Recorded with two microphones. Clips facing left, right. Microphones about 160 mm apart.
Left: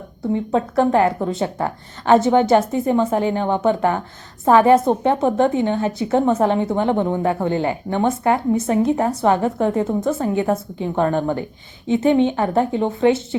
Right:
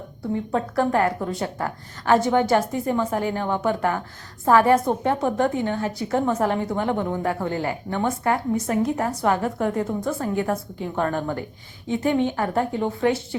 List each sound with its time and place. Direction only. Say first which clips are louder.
0.2 s a woman's voice: left 5 dB; 20° left (ahead or behind)